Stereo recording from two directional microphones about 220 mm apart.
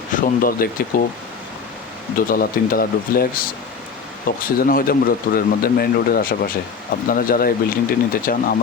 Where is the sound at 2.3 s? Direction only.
40° left (ahead or behind).